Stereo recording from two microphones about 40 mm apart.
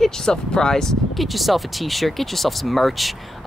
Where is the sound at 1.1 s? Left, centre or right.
Centre.